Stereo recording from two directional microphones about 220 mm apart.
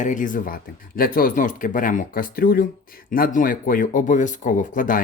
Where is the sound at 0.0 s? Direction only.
35° left (ahead or behind).